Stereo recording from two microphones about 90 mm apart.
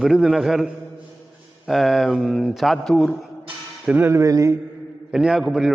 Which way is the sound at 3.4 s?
20° right (ahead or behind).